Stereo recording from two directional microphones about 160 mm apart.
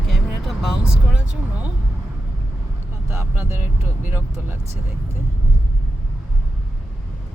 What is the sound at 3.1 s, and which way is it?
Speech, 15° right (ahead or behind).